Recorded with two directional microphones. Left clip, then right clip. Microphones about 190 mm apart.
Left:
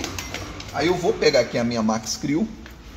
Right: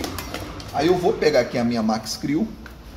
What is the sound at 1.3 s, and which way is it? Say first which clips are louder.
A man's voice: even; 20° left (ahead or behind).